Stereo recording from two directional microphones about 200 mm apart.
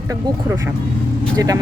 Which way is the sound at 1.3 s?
15° right (ahead or behind).